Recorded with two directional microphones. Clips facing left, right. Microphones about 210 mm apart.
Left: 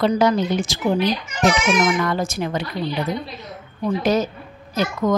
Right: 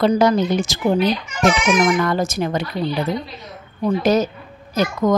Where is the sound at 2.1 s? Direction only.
40° right (ahead or behind).